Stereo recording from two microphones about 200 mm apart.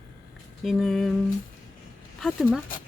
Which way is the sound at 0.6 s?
Centre (ahead or behind).